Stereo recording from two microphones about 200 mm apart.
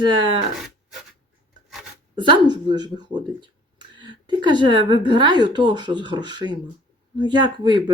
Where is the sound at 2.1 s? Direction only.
25° right (ahead or behind).